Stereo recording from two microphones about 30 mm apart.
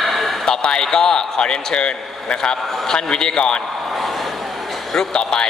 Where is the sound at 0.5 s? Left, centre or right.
Left.